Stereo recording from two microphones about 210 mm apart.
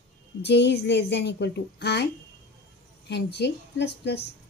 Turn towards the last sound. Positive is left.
turn(degrees=55)  # may be behind; listen again after turning